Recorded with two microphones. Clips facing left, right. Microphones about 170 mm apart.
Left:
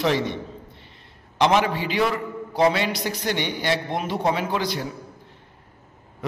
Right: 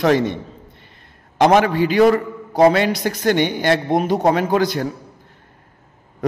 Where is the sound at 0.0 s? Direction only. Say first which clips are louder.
Right 6 dB; 50° right (ahead or behind).